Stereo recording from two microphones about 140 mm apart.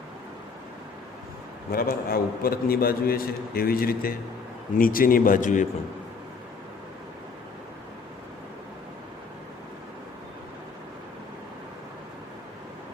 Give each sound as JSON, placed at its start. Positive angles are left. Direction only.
{"t": 1.7, "sound": "a man's voice", "side_deg": 90}